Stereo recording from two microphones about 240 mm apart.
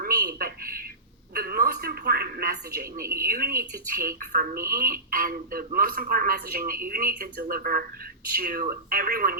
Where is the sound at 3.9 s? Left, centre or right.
Right.